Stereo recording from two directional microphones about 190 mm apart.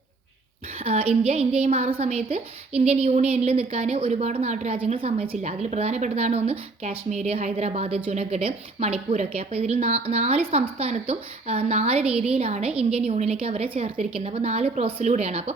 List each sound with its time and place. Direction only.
0.8 s a sound: 30° right (ahead or behind)
1.3 s a woman's voice: 35° right (ahead or behind)
12.0 s a woman's voice: 5° right (ahead or behind)
12.3 s a woman's voice: 35° right (ahead or behind)